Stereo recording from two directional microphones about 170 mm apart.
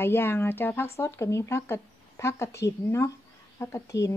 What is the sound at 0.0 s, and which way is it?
Speech, 15° left (ahead or behind).